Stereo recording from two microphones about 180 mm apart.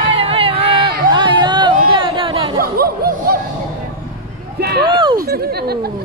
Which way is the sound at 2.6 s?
55° right (ahead or behind).